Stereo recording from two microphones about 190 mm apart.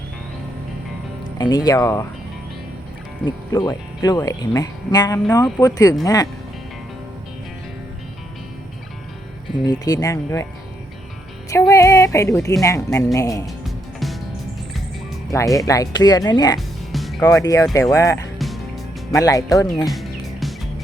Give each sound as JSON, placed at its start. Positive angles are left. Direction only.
{"t": 1.4, "sound": "speech", "side_deg": 20}
{"t": 3.2, "sound": "speech", "side_deg": 20}
{"t": 9.6, "sound": "speech", "side_deg": 20}
{"t": 11.7, "sound": "speech", "side_deg": 15}
{"t": 13.7, "sound": "music", "side_deg": 0}
{"t": 15.3, "sound": "speech", "side_deg": 15}
{"t": 16.6, "sound": "music", "side_deg": 0}
{"t": 17.2, "sound": "speech", "side_deg": 15}
{"t": 18.3, "sound": "music", "side_deg": 0}
{"t": 19.1, "sound": "speech", "side_deg": 20}
{"t": 19.8, "sound": "music", "side_deg": 0}